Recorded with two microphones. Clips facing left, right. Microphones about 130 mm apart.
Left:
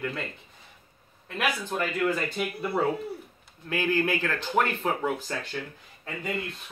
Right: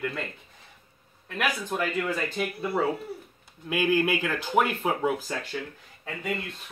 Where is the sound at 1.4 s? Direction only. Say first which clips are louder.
Even; centre (ahead or behind).